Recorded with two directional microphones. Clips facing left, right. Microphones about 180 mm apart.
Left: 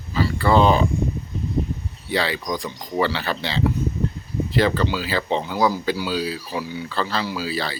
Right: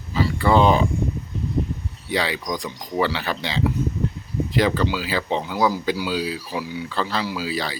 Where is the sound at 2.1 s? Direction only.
15° right (ahead or behind).